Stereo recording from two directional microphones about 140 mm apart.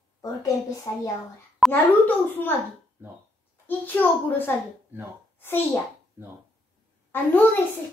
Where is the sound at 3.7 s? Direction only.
10° left (ahead or behind).